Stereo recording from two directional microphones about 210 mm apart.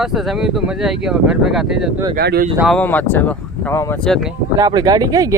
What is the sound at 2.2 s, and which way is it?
Speech, 50° right (ahead or behind).